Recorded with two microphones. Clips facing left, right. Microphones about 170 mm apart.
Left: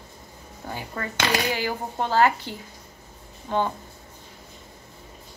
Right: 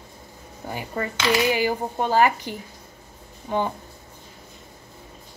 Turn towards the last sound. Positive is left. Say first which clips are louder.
# even
turn(degrees=-10)  # may be behind; listen again after turning